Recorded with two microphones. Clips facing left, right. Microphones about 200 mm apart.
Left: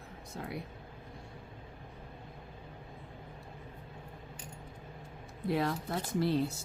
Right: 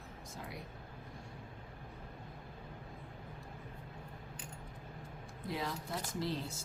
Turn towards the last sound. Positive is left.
turn(degrees=60)  # may be behind; listen again after turning